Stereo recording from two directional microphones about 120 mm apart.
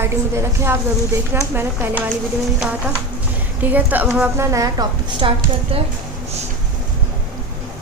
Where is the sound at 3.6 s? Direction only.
15° right (ahead or behind).